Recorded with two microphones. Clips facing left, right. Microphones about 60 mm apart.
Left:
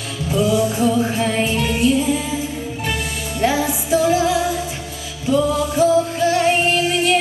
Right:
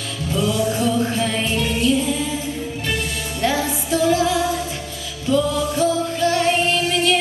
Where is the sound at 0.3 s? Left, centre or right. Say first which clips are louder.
Left 3 dB; centre.